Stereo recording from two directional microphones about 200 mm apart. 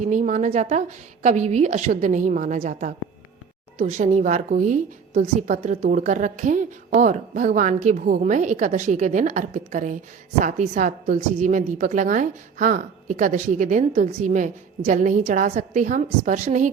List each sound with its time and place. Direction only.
0.0 s a woman's voice: 40° right (ahead or behind)